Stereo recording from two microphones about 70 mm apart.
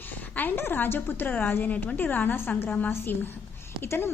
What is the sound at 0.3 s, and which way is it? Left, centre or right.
A woman's voice, left.